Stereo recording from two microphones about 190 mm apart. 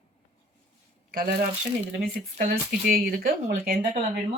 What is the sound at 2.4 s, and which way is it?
Speech, 50° right (ahead or behind).